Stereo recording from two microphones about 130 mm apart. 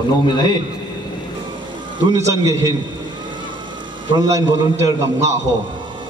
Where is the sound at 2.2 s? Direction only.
25° right (ahead or behind).